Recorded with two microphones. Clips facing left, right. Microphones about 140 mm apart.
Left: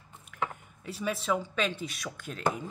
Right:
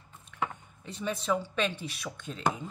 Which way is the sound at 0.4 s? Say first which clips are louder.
Even; 5° left (ahead or behind).